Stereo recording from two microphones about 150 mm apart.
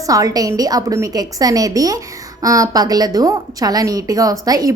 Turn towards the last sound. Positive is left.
turn(degrees=-25)  # may be behind; listen again after turning